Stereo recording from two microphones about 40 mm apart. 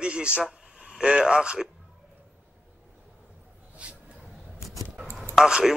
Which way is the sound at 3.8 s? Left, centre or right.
Right.